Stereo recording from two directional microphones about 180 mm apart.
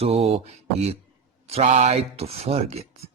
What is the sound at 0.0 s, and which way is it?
Speech, 35° right (ahead or behind).